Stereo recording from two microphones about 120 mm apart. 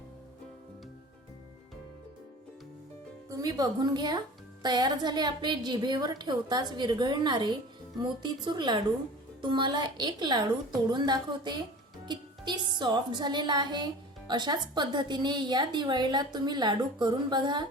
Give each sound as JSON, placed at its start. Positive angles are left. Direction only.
{"t": 3.2, "sound": "a woman's voice", "side_deg": -30}